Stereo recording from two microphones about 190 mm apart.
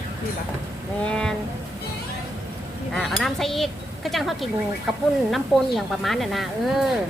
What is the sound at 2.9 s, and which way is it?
Speech, centre (ahead or behind).